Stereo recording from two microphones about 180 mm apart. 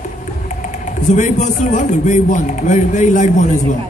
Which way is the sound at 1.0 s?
40° left (ahead or behind).